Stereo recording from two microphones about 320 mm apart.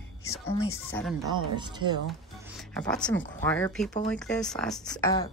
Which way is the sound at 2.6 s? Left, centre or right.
Centre.